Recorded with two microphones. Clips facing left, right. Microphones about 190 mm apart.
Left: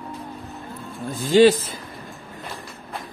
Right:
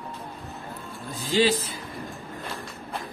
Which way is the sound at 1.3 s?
55° left (ahead or behind).